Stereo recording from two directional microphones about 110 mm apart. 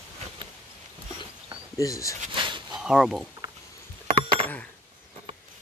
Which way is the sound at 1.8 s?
30° left (ahead or behind).